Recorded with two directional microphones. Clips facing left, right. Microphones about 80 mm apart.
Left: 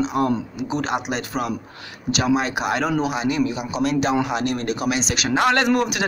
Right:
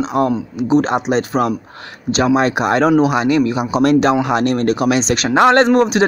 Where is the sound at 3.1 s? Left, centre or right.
Right.